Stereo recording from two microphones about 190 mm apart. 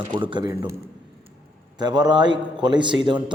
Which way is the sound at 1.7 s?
20° right (ahead or behind).